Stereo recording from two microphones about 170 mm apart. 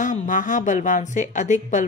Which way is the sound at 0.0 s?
50° left (ahead or behind).